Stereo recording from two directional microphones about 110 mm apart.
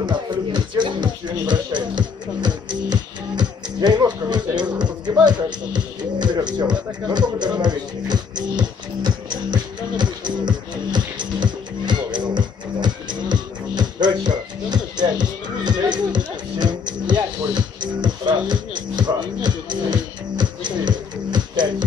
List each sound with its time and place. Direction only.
0.0 s music: 40° right (ahead or behind)